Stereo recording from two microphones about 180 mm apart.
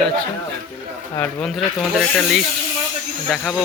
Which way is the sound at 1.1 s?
10° left (ahead or behind).